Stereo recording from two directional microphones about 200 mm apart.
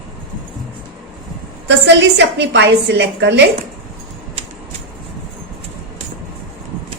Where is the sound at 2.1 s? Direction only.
60° right (ahead or behind).